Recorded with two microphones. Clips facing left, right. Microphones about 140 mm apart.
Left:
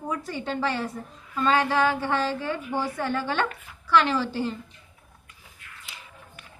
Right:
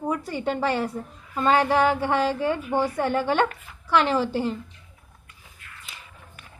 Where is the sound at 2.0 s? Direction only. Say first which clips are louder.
Right 4 dB; 55° right (ahead or behind).